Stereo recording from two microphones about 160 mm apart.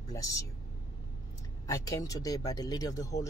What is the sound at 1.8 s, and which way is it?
Speech, 20° left (ahead or behind).